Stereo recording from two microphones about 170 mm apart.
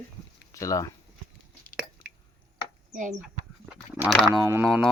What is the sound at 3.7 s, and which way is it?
Speech, 5° right (ahead or behind).